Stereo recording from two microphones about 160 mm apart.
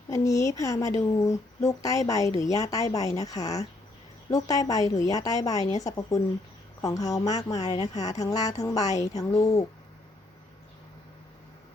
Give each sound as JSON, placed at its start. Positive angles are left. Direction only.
{"t": 0.1, "sound": "a woman's voice", "side_deg": 20}
{"t": 7.5, "sound": "speech", "side_deg": 40}
{"t": 8.2, "sound": "a woman's voice", "side_deg": 20}